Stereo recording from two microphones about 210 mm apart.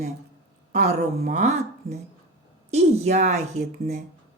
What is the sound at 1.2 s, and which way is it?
Speech, 35° right (ahead or behind).